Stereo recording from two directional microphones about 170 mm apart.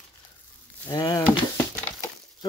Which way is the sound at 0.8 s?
20° left (ahead or behind).